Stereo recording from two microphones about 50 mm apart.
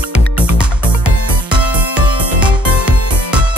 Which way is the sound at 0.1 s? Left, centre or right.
Right.